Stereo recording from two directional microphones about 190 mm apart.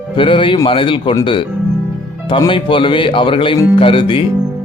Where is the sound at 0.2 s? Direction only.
25° left (ahead or behind).